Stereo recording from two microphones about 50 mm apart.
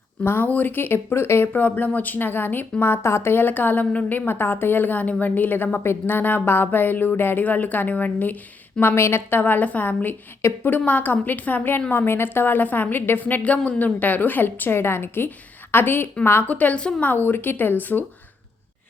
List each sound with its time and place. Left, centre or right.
0.4 s a woman's voice: left
1.5 s a woman's voice: left
3.3 s a woman's voice: left
4.3 s a woman's voice: left
7.4 s a woman's voice: left
8.8 s a woman's voice: left
9.4 s a woman's voice: left
16.5 s a woman's voice: left
17.0 s a woman's voice: left